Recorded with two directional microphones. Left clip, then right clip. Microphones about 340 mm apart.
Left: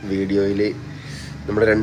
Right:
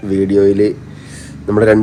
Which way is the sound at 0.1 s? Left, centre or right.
Centre.